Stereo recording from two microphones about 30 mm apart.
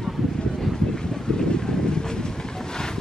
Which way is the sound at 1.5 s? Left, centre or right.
Left.